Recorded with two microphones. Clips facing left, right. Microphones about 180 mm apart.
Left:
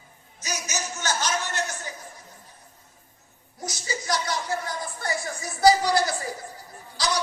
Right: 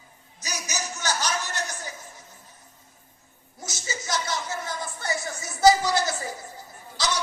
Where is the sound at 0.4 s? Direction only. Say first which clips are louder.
Left 1 dB; 35° right (ahead or behind).